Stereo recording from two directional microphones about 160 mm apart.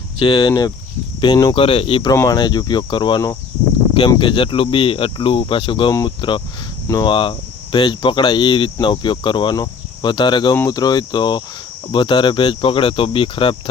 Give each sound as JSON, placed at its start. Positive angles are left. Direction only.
{"t": 0.2, "sound": "speech", "side_deg": 30}
{"t": 1.5, "sound": "speech", "side_deg": 35}